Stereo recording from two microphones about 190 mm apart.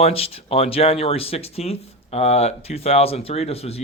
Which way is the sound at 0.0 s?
30° left (ahead or behind).